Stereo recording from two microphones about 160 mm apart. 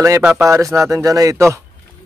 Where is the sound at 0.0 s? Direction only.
15° right (ahead or behind).